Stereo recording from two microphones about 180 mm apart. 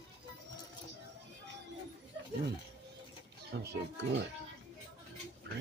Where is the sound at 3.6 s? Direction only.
80° right.